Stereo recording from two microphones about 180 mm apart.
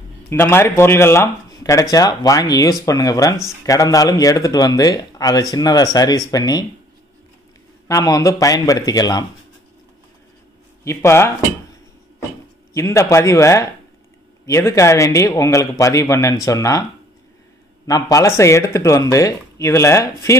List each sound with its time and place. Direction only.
0.3 s speech: 15° left (ahead or behind)
7.9 s speech: 20° left (ahead or behind)
10.8 s speech: 15° left (ahead or behind)
12.7 s speech: 15° left (ahead or behind)
17.8 s speech: 20° left (ahead or behind)